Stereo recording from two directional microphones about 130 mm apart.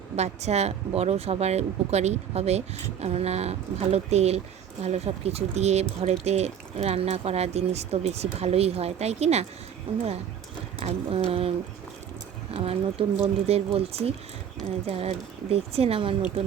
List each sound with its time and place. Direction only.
0.2 s speech: 55° right (ahead or behind)
10.8 s speech: 45° right (ahead or behind)
12.5 s speech: 45° right (ahead or behind)